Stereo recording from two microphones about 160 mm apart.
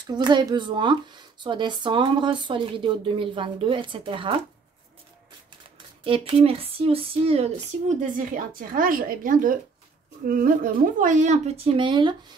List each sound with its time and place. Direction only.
0.0 s speech: 25° right (ahead or behind)
6.0 s speech: 35° right (ahead or behind)
8.0 s speech: 60° right (ahead or behind); by 12.4 s 30° right (ahead or behind)